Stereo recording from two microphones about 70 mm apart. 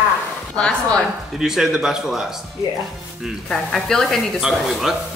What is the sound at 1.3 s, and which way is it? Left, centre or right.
Speech, centre.